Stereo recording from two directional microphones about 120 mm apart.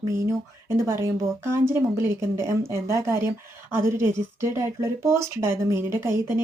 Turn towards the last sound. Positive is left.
turn(degrees=-20)  # may be behind; listen again after turning